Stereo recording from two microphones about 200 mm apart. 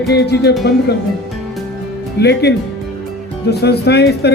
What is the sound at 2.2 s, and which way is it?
Speech, 55° left (ahead or behind).